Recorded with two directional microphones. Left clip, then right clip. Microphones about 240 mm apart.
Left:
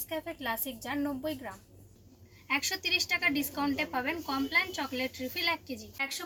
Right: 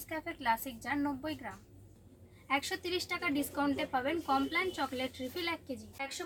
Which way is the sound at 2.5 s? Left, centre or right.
Centre.